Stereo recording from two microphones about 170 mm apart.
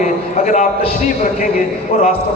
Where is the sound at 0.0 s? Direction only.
45° left (ahead or behind).